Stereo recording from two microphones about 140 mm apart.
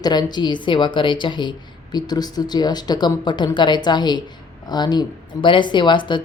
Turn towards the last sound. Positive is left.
turn(degrees=35)  # may be behind; listen again after turning